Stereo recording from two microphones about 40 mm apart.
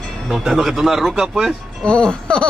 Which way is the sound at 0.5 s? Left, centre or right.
Centre.